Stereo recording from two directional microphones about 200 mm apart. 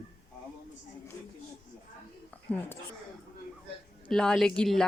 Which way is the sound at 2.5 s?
5° left (ahead or behind).